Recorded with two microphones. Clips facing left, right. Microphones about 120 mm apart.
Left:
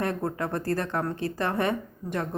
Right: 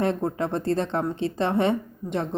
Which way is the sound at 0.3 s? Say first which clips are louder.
Right 4 dB; 25° right (ahead or behind).